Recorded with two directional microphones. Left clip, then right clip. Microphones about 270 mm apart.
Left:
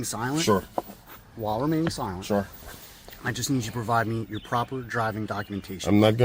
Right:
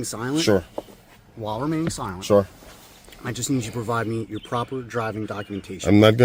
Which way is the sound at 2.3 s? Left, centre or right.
Right.